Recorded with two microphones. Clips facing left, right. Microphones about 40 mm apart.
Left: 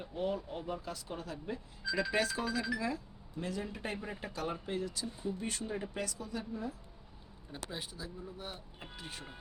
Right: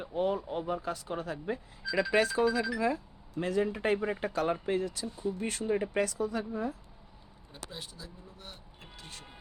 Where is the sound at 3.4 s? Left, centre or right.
Right.